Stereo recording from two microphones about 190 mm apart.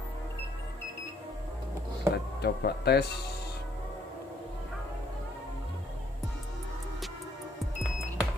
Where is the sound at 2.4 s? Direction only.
60° left (ahead or behind).